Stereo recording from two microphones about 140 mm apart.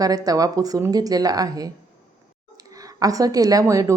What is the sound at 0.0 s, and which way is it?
A woman's voice, 25° right (ahead or behind).